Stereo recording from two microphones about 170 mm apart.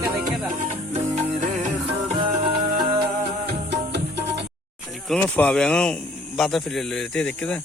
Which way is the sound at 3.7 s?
80° right.